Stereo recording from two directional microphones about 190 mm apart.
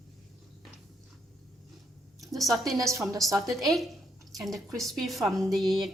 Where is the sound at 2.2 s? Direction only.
Centre (ahead or behind).